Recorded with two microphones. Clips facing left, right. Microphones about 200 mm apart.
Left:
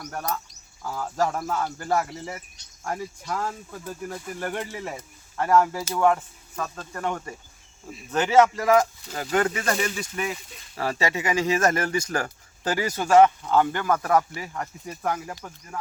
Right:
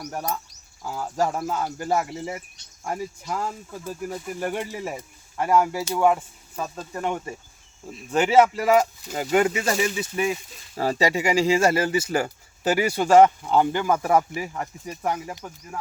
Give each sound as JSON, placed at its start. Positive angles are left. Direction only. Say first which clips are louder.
{"t": 0.0, "sound": "speech", "louder": "right 1 dB", "side_deg": -10}
{"t": 8.4, "sound": "speech", "louder": "even", "side_deg": -10}
{"t": 13.1, "sound": "speech", "louder": "right 1 dB", "side_deg": -30}
{"t": 13.4, "sound": "speech", "louder": "right 1 dB", "side_deg": -15}